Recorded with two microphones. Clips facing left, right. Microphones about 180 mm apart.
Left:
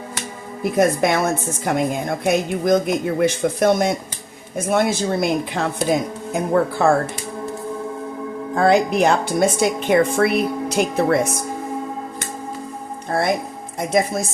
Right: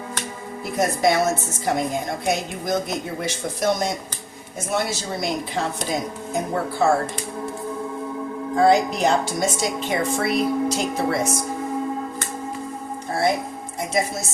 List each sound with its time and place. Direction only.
0.6 s a woman's voice: 55° left (ahead or behind)
8.5 s a woman's voice: 60° left (ahead or behind)
13.7 s a woman's voice: 55° left (ahead or behind)